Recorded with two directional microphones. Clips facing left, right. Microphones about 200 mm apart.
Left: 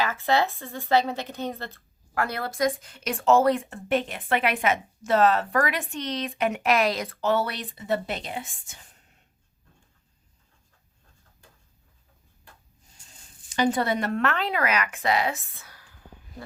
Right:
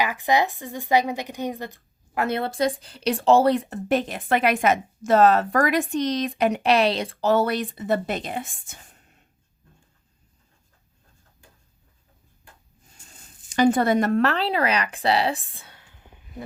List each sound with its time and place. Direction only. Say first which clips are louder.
0.0 s a woman's voice: right 2 dB; 15° right (ahead or behind); by 8.8 s 50° right (ahead or behind)
13.6 s a woman's voice: right 5 dB; 50° right (ahead or behind); by 16.1 s 20° right (ahead or behind)